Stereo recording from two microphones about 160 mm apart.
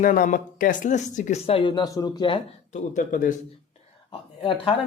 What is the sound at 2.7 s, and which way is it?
Speech, 50° left (ahead or behind).